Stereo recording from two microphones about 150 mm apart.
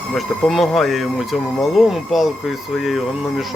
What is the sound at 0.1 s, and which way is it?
Speech, centre (ahead or behind).